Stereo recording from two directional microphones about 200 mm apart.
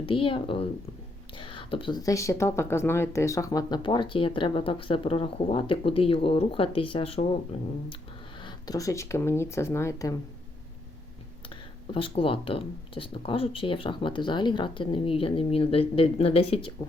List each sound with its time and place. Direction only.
0.0 s speech: 25° left (ahead or behind)
8.4 s speech: 20° left (ahead or behind)
11.4 s speech: 25° left (ahead or behind)